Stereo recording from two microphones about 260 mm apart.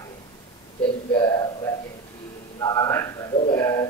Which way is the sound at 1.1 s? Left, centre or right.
Centre.